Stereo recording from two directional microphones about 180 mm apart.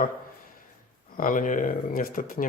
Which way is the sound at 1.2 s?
45° left (ahead or behind).